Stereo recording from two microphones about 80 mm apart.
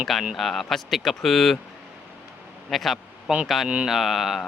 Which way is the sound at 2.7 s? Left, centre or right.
Centre.